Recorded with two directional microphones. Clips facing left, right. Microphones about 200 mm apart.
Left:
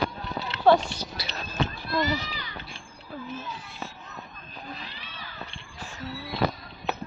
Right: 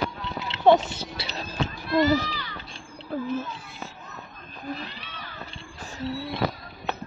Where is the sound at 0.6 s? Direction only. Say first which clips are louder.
Right 2 dB; 25° right (ahead or behind).